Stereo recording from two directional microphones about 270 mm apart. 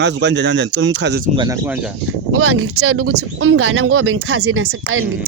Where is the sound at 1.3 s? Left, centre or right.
Centre.